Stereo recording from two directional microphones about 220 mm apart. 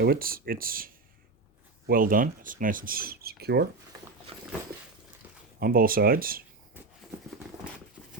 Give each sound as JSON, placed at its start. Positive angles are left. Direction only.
{"t": 0.0, "sound": "speech", "side_deg": -40}
{"t": 1.9, "sound": "speech", "side_deg": -40}
{"t": 4.7, "sound": "a sound", "side_deg": -45}
{"t": 5.5, "sound": "speech", "side_deg": -40}